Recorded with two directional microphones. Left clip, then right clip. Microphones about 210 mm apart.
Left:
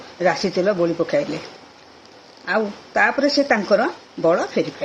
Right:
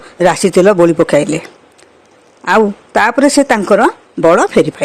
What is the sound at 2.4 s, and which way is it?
Speech, 55° right (ahead or behind).